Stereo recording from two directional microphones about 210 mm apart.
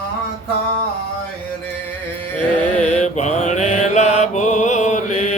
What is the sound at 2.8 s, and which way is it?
Mantra, 35° left (ahead or behind).